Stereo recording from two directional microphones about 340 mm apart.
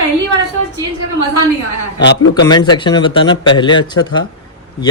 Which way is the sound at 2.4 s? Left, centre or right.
Centre.